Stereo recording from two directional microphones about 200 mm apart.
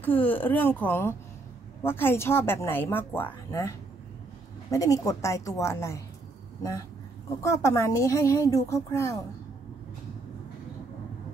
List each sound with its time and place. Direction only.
0.0 s a woman's voice: 10° left (ahead or behind)
7.4 s a woman's voice: 15° left (ahead or behind)